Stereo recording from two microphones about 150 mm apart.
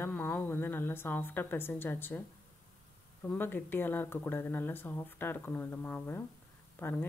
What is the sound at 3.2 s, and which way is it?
Speech, 15° left (ahead or behind).